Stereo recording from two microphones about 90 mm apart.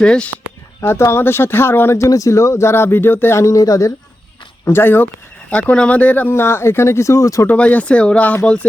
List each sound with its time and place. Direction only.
0.0 s speech: 10° left (ahead or behind)
0.8 s speech: 30° left (ahead or behind)
4.6 s speech: 25° left (ahead or behind)
5.5 s speech: 15° left (ahead or behind); by 7.4 s 35° left (ahead or behind)
7.4 s speech: 15° left (ahead or behind)